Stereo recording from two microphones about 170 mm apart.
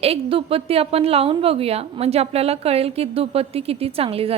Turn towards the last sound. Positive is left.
turn(degrees=-35)  # may be behind; listen again after turning